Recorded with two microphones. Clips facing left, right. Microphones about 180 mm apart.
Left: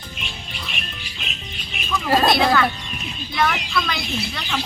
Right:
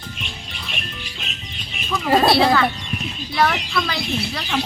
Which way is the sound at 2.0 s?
25° right (ahead or behind).